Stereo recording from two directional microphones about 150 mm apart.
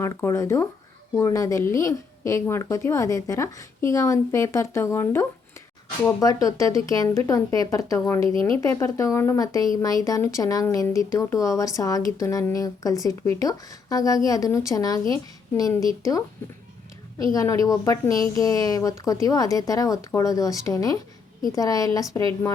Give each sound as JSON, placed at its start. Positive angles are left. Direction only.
{"t": 0.0, "sound": "speech", "side_deg": 20}
{"t": 17.3, "sound": "speech", "side_deg": 20}